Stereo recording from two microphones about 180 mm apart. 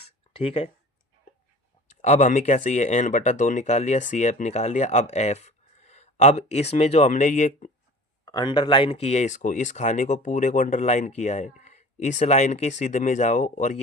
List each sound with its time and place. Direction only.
0.3 s speech: 30° left (ahead or behind)
1.9 s speech: 40° left (ahead or behind)
8.2 s speech: 25° left (ahead or behind); by 13.8 s 40° left (ahead or behind)